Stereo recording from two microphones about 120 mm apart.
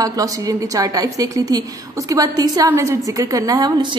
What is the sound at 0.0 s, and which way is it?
A woman's voice, 30° right (ahead or behind).